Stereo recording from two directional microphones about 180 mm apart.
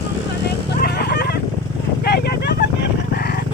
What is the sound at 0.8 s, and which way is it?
Music, 60° left (ahead or behind).